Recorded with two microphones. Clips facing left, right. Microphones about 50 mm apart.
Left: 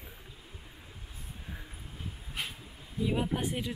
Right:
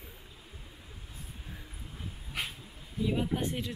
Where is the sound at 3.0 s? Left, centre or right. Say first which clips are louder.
Even; centre.